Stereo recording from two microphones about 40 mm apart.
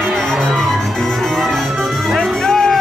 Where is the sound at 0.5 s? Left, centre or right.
Centre.